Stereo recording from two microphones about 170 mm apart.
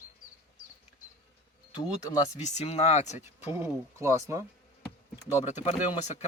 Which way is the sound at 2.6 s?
35° left (ahead or behind).